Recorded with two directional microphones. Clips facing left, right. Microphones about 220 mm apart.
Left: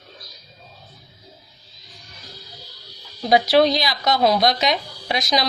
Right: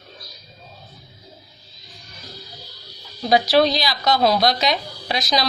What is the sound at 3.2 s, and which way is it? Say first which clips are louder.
A woman's voice: left 1 dB; 20° left (ahead or behind).